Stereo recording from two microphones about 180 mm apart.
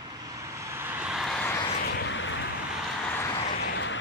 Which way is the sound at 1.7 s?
60° left (ahead or behind).